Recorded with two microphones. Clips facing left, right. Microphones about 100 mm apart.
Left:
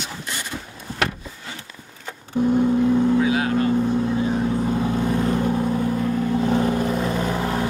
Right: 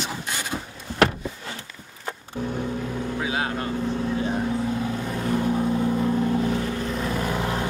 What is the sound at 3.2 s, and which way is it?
Motorboat, 30° right (ahead or behind).